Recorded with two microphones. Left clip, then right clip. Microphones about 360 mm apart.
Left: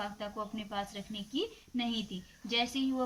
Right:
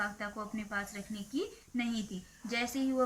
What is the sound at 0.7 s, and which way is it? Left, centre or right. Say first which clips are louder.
Speech: right 1 dB; centre.